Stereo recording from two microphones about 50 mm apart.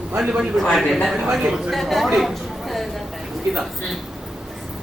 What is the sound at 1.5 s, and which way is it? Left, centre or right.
Speech, centre.